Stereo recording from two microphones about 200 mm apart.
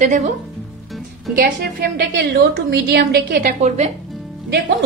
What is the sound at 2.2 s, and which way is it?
A woman's voice, 55° right (ahead or behind).